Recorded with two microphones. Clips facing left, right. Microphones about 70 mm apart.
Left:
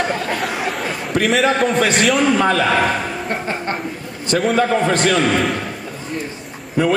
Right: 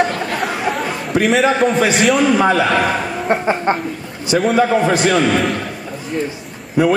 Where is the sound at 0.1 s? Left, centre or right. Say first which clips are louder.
Right 1 dB; centre.